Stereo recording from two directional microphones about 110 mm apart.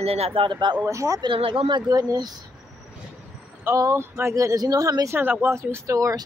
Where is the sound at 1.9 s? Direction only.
35° right (ahead or behind).